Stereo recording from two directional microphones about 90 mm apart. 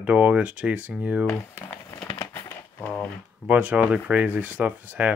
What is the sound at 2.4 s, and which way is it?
Typewriter, 15° left (ahead or behind).